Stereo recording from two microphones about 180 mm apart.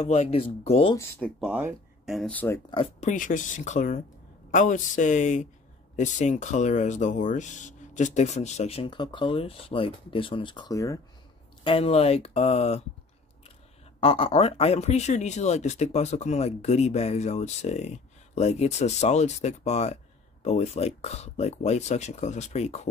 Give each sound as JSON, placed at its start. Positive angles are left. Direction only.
{"t": 0.0, "sound": "speech", "side_deg": 35}
{"t": 0.9, "sound": "speech", "side_deg": 15}
{"t": 1.4, "sound": "speech", "side_deg": -5}
{"t": 3.0, "sound": "speech", "side_deg": 45}
{"t": 11.6, "sound": "speech", "side_deg": 30}
{"t": 13.9, "sound": "speech", "side_deg": 30}